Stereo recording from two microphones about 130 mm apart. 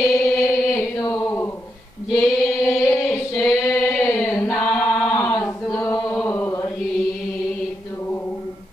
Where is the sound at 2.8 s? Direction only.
10° left (ahead or behind).